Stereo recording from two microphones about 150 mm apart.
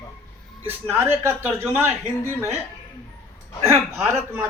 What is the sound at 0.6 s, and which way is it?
A man's voice, 15° right (ahead or behind).